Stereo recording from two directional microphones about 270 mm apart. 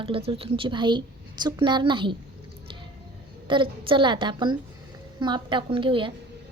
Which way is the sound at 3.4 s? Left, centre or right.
Centre.